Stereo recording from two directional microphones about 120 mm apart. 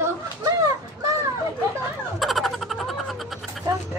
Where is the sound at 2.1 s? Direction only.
Centre (ahead or behind).